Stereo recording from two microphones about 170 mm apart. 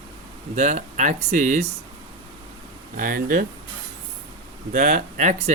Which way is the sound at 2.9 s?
55° right (ahead or behind).